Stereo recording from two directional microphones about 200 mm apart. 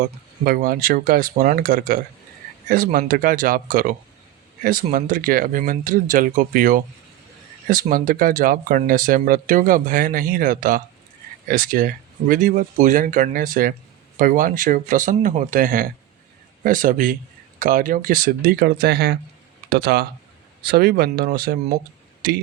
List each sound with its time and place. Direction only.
0.4 s speech: 45° right (ahead or behind)